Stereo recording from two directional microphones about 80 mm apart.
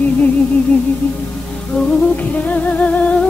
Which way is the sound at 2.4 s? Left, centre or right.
Centre.